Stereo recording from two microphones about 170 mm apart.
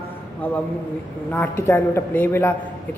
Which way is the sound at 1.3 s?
10° left (ahead or behind).